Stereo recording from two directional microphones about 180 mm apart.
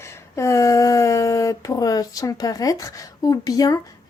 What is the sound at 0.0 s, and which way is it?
Speech, 15° left (ahead or behind).